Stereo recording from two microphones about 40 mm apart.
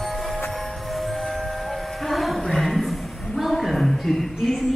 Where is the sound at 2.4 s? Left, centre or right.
Centre.